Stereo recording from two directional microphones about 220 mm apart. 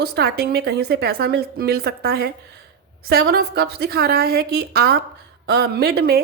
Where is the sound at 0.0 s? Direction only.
45° right (ahead or behind).